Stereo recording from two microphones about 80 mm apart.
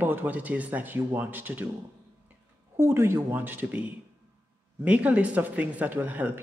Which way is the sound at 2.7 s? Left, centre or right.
Right.